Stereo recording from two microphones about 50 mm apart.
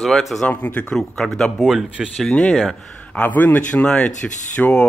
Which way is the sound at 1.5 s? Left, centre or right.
Centre.